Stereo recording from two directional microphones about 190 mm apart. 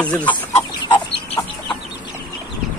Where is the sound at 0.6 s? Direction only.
10° left (ahead or behind).